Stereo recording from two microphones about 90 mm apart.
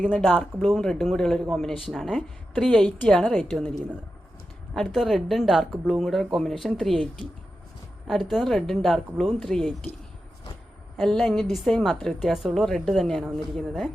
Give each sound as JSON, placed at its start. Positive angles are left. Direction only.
{"t": 0.6, "sound": "speech", "side_deg": 0}
{"t": 2.6, "sound": "a woman's voice", "side_deg": 15}
{"t": 4.7, "sound": "speech", "side_deg": 0}
{"t": 10.9, "sound": "speech", "side_deg": 5}